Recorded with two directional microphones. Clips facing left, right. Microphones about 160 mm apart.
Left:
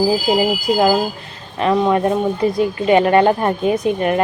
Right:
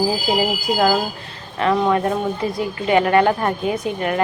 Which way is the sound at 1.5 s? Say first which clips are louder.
Left 2 dB; 20° left (ahead or behind).